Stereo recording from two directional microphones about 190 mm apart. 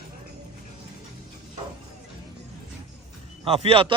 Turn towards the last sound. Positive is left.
turn(degrees=-30)  # may be behind; listen again after turning